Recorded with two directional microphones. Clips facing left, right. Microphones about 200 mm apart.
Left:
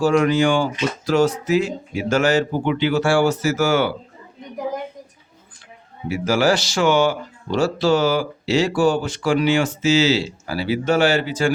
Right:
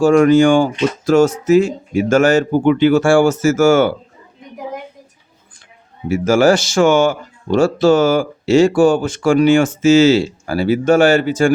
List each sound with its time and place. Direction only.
0.0 s speech: 50° right (ahead or behind)
6.1 s speech: 50° right (ahead or behind)